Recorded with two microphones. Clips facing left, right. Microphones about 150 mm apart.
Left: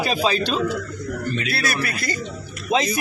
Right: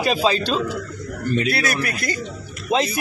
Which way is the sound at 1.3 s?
45° right (ahead or behind).